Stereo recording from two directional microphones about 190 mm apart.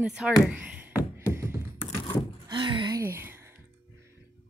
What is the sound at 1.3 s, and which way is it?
Beatboxing, 10° right (ahead or behind).